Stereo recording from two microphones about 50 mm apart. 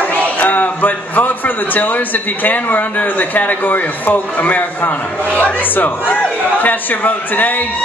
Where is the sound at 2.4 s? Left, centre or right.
Left.